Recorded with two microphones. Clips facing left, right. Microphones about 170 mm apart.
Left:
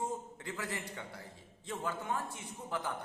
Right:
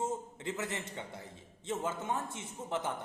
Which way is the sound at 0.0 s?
25° right (ahead or behind).